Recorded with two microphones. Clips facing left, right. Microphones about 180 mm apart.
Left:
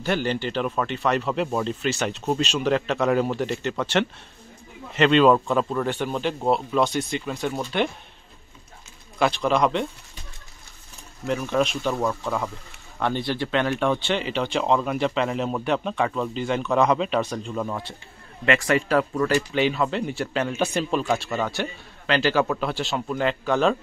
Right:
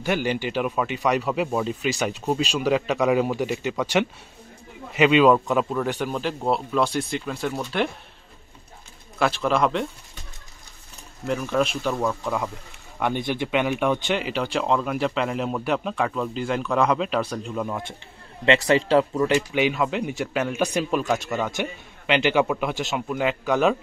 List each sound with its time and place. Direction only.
0.0 s speech: 10° right (ahead or behind)
9.2 s speech: 5° right (ahead or behind)
11.2 s speech: centre (ahead or behind)
11.8 s speech: 10° left (ahead or behind)
13.0 s speech: 15° right (ahead or behind)
18.4 s a man's voice: 25° right (ahead or behind)
19.5 s speech: 10° right (ahead or behind)
21.5 s speech: 20° right (ahead or behind)